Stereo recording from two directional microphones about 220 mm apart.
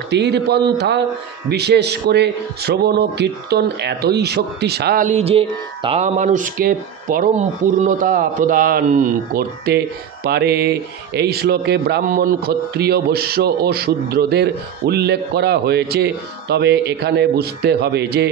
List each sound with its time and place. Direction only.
0.1 s a man's voice: 50° right (ahead or behind)